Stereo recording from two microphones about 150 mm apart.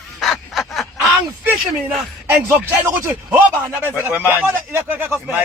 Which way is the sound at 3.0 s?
10° right (ahead or behind).